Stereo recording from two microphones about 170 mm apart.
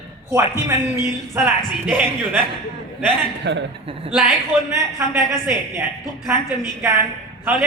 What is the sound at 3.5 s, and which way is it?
Speech, 90° right.